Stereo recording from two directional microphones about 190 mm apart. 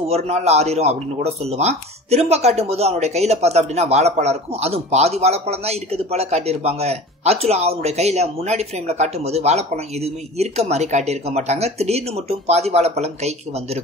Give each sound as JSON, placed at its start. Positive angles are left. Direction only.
{"t": 0.0, "sound": "speech", "side_deg": -35}